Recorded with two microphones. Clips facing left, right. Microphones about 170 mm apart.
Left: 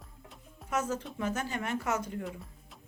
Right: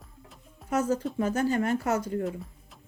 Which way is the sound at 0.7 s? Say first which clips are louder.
Right 6 dB; 35° right (ahead or behind).